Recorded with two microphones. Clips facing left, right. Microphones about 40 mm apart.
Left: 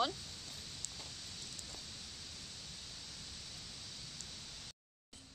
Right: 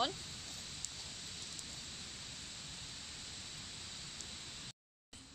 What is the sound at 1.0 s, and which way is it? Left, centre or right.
Rain, centre.